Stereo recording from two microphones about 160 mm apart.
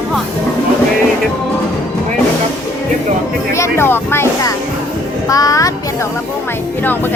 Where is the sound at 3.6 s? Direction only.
15° left (ahead or behind).